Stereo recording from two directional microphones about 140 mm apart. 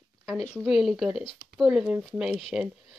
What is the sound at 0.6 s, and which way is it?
Speech, centre (ahead or behind).